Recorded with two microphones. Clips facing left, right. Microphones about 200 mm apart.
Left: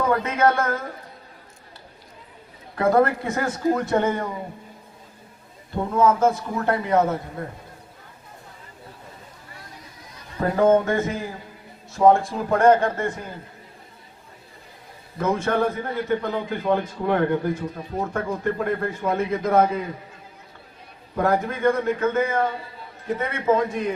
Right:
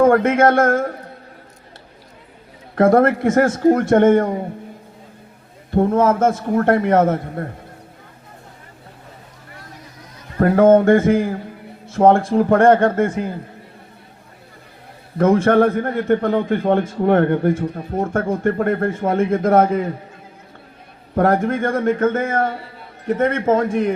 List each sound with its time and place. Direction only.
0.2 s speech: 90° right
2.7 s speech: 80° right
3.6 s speech: 50° right (ahead or behind)
4.2 s speech: 50° right (ahead or behind)
5.7 s speech: 50° right (ahead or behind)
10.4 s a man's voice: 65° right (ahead or behind)
10.7 s a man's voice: 50° right (ahead or behind)
15.2 s a man's voice: 55° right (ahead or behind)
21.2 s speech: 55° right (ahead or behind)